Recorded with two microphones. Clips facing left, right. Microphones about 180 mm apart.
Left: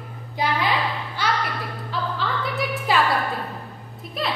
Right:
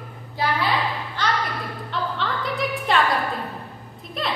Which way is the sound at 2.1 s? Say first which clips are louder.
Even; centre (ahead or behind).